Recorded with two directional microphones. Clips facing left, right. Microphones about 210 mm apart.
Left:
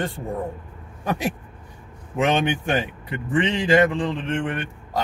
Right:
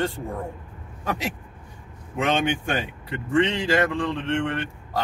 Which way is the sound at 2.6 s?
20° left (ahead or behind).